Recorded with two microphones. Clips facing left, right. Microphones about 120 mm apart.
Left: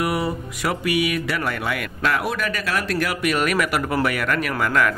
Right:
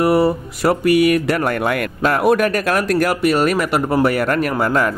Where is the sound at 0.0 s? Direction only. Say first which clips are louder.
Right 9 dB; 35° right (ahead or behind); by 1.9 s 50° right (ahead or behind).